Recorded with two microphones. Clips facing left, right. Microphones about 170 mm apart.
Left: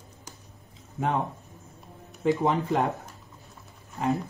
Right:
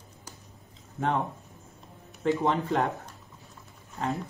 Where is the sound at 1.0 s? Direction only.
15° left (ahead or behind).